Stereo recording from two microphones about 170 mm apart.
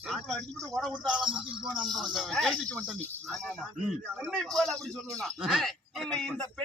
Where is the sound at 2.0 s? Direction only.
Centre (ahead or behind).